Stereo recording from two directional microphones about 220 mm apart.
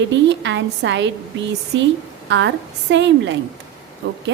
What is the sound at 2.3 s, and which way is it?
A woman's voice, 55° right (ahead or behind).